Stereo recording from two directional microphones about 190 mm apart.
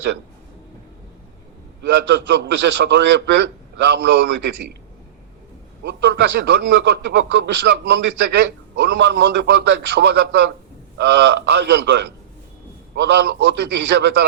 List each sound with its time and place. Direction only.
1.8 s a man's voice: 70° right (ahead or behind)
5.8 s a man's voice: 65° right (ahead or behind)